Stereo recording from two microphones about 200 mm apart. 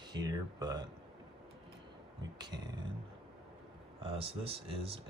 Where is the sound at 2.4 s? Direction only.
20° right (ahead or behind).